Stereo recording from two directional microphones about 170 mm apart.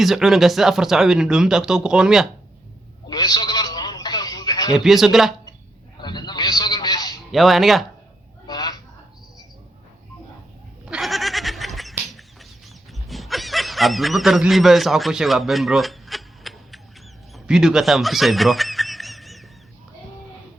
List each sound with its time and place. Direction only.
0.0 s speech: centre (ahead or behind)
3.1 s telephone: 25° left (ahead or behind)
4.7 s speech: centre (ahead or behind)
6.0 s a sound: 25° left (ahead or behind)
7.3 s speech: centre (ahead or behind)
8.4 s a sound: 25° left (ahead or behind)
10.8 s goat: centre (ahead or behind)
17.3 s snicker: 5° right (ahead or behind)